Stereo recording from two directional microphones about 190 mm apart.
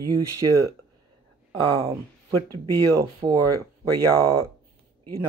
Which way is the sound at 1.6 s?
20° right (ahead or behind).